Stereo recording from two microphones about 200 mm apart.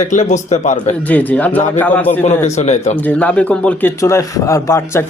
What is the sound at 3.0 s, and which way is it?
Speech, 5° left (ahead or behind).